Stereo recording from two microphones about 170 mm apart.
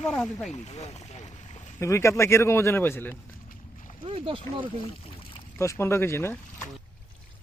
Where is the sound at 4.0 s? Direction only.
35° right (ahead or behind).